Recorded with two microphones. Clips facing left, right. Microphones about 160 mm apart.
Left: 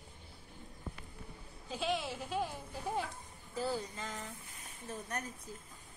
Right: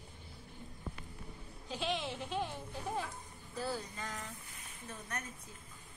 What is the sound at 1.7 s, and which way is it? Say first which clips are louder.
Speech: left 1 dB; 10° left (ahead or behind).